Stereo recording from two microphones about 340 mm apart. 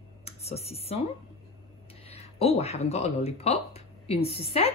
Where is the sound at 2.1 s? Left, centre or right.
Centre.